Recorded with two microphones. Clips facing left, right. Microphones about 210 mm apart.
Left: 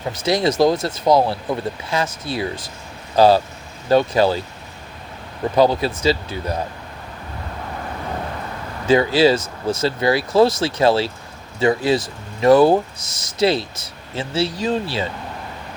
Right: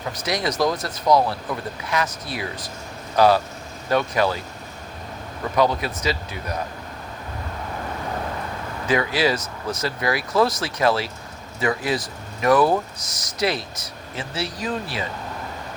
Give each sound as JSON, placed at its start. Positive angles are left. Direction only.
{"t": 0.1, "sound": "speech", "side_deg": 25}
{"t": 5.5, "sound": "speech", "side_deg": 30}
{"t": 8.9, "sound": "speech", "side_deg": 30}